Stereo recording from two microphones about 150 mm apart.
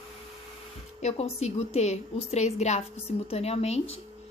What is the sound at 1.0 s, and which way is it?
A woman's voice, 45° left (ahead or behind).